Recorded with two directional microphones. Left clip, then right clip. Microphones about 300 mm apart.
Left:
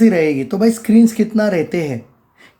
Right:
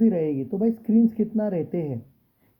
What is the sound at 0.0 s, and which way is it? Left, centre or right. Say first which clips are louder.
Speech: left 10 dB; centre.